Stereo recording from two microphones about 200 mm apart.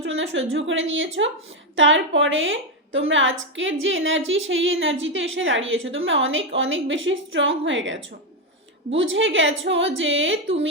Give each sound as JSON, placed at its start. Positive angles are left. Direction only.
{"t": 0.0, "sound": "a woman's voice", "side_deg": -70}